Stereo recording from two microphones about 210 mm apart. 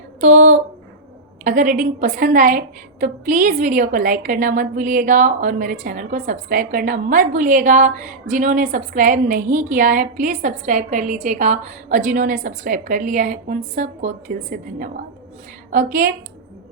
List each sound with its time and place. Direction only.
0.2 s a woman's voice: 35° right (ahead or behind)